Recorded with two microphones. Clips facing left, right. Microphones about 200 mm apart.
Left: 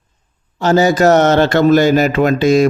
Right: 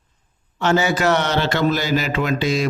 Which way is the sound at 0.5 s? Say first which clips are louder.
Left 6 dB; 35° left (ahead or behind).